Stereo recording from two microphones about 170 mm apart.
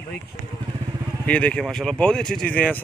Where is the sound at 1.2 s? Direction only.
5° left (ahead or behind).